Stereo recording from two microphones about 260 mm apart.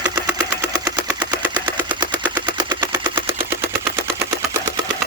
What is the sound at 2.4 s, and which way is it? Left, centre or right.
Machine gun, centre.